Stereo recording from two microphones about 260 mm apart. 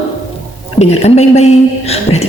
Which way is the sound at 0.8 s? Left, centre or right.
Left.